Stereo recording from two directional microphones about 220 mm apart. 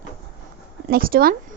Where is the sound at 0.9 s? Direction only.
40° right (ahead or behind).